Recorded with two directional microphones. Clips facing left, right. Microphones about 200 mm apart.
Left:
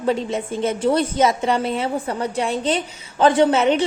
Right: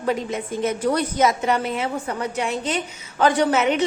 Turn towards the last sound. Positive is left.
turn(degrees=30)  # may be behind; listen again after turning